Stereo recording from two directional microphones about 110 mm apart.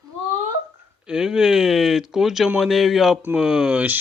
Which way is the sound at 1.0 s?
5° right (ahead or behind).